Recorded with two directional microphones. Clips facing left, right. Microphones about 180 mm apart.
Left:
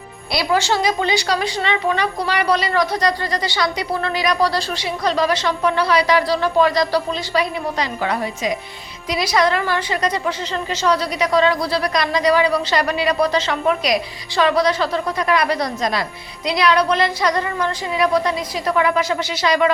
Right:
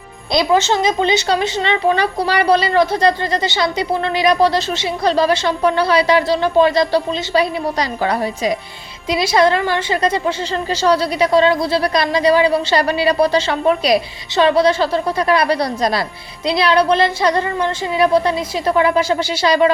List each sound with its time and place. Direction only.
0.3 s a woman's voice: 20° right (ahead or behind)